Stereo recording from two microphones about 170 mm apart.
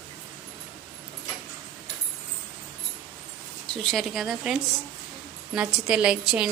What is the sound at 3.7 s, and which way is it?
A woman's voice, centre (ahead or behind).